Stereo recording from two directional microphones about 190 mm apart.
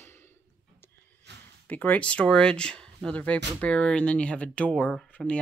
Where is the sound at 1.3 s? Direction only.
65° right (ahead or behind).